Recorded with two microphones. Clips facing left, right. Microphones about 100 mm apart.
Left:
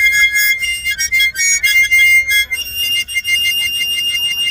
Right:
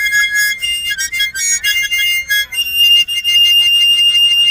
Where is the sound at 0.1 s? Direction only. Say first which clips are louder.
Right 1 dB; 55° right (ahead or behind).